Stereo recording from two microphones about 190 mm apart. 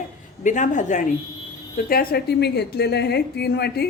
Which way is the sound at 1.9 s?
50° left (ahead or behind).